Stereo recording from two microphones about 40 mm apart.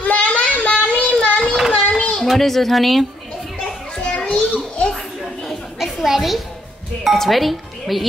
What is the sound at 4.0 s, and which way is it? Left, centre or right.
Children playing, left.